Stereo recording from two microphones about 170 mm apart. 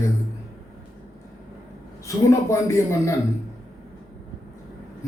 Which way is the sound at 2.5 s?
15° left (ahead or behind).